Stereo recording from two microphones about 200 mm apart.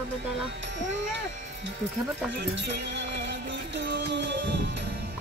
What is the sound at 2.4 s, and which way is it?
Music, 60° right (ahead or behind).